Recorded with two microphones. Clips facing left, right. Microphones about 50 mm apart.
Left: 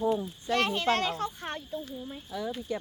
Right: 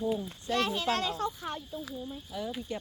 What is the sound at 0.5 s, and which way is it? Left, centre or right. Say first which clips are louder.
Speech: left 3 dB; left.